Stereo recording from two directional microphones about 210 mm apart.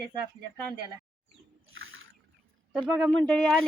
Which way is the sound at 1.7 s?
70° right (ahead or behind).